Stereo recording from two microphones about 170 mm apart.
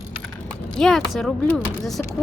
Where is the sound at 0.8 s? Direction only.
Centre (ahead or behind).